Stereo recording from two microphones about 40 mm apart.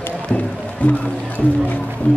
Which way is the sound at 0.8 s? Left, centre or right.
Left.